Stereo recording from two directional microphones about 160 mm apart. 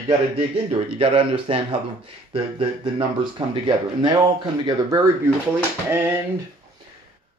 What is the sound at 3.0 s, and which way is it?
Speech, 30° right (ahead or behind).